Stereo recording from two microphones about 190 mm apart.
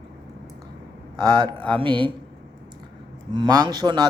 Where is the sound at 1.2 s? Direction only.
25° right (ahead or behind).